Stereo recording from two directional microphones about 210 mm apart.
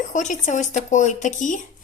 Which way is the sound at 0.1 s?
35° left (ahead or behind).